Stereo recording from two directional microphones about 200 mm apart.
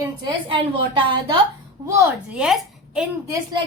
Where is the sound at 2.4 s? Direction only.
5° right (ahead or behind).